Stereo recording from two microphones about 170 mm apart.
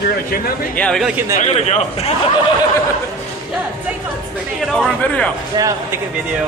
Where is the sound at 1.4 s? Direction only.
40° left (ahead or behind).